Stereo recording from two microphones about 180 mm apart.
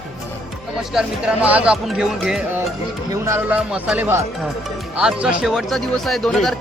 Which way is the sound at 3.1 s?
15° right (ahead or behind).